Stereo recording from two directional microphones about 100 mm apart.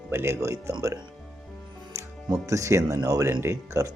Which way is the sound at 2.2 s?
35° right (ahead or behind).